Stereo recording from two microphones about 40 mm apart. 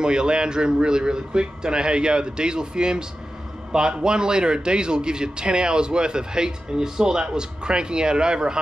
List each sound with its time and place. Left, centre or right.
0.0 s a man's voice: right